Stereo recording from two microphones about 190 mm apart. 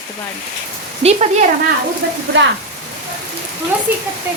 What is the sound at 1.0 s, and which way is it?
Speech, 35° right (ahead or behind).